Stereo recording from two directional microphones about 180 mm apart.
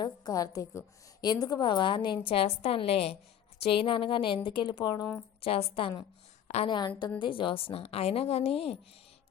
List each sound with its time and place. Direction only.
0.0 s a woman's voice: 20° left (ahead or behind)